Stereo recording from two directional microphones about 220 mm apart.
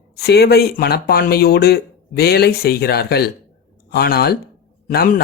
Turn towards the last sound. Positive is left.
turn(degrees=45)  # may be behind; listen again after turning